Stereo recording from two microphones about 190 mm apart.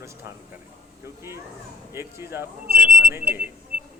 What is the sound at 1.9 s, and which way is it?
Speech, 15° right (ahead or behind).